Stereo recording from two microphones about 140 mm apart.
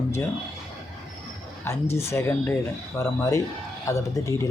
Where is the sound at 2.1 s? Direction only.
15° left (ahead or behind).